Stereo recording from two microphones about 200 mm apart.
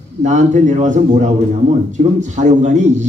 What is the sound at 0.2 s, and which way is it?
A man's voice, 40° right (ahead or behind).